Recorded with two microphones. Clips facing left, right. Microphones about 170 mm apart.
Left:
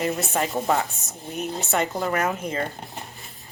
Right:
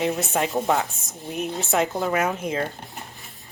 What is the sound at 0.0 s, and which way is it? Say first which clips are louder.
A woman's voice: right 1 dB; centre (ahead or behind).